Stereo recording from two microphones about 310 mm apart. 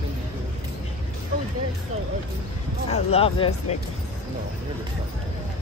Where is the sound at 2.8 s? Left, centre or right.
Centre.